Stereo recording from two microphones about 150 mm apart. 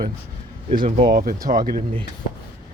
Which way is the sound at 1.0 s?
80° right.